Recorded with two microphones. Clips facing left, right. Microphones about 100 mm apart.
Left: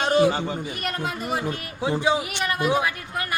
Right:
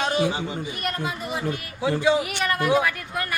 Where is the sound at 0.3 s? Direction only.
50° left (ahead or behind).